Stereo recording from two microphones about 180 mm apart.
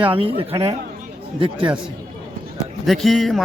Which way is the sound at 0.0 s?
30° right (ahead or behind).